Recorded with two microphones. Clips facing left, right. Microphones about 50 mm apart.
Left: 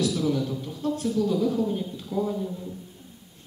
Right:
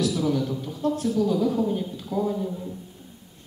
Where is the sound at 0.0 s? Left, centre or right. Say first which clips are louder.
Right 1 dB; centre.